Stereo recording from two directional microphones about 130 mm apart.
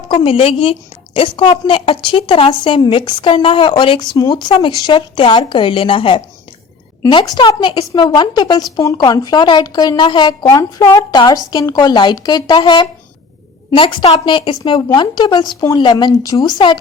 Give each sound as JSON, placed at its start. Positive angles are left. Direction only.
{"t": 0.1, "sound": "a woman's voice", "side_deg": 40}
{"t": 10.5, "sound": "a woman's voice", "side_deg": 25}